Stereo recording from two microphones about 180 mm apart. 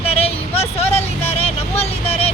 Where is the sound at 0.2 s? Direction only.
35° left (ahead or behind).